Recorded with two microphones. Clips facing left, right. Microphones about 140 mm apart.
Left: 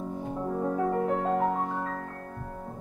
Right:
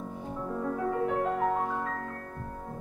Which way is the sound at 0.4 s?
30° left (ahead or behind).